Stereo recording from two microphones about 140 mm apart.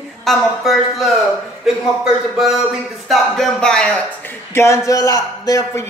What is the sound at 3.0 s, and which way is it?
Speech, 5° left (ahead or behind).